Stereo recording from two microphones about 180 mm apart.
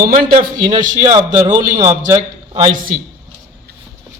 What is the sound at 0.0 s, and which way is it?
Speech, 55° right (ahead or behind).